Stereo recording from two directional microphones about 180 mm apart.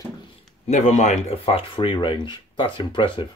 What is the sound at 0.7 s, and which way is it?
Speech, 40° left (ahead or behind).